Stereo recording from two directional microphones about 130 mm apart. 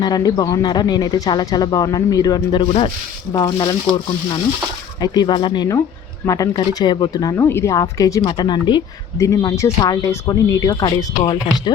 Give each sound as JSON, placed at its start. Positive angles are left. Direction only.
{"t": 0.0, "sound": "speech", "side_deg": 30}
{"t": 3.3, "sound": "speech", "side_deg": 30}
{"t": 4.9, "sound": "speech", "side_deg": 30}
{"t": 9.1, "sound": "speech", "side_deg": 25}